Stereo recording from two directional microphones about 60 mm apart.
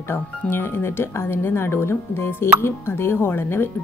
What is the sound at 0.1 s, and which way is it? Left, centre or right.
A woman's voice, left.